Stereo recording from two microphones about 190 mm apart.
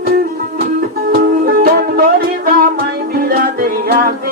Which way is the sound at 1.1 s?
50° right (ahead or behind).